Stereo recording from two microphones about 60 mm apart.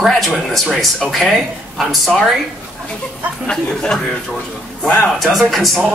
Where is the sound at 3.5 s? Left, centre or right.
Centre.